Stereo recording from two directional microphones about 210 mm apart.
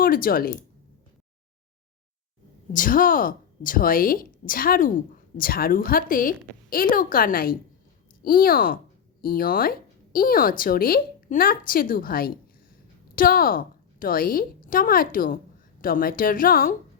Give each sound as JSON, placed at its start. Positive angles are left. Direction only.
{"t": 0.0, "sound": "speech", "side_deg": 45}
{"t": 2.7, "sound": "a woman's voice", "side_deg": 40}